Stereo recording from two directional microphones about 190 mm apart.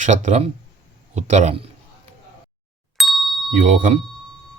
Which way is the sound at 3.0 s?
Centre (ahead or behind).